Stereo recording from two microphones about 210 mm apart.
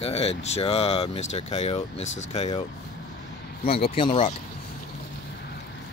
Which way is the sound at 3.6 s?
45° left (ahead or behind).